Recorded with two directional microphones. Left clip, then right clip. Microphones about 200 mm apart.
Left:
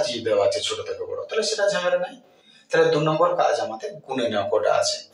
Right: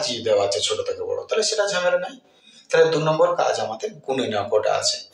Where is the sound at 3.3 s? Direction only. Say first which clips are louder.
Even; 15° right (ahead or behind).